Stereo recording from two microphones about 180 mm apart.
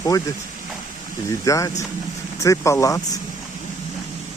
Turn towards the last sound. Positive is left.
turn(degrees=15)  # may be behind; listen again after turning